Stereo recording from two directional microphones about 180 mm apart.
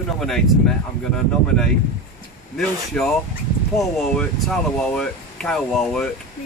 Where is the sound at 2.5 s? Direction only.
Centre (ahead or behind).